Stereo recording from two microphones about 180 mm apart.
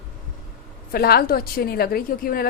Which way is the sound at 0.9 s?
55° left (ahead or behind).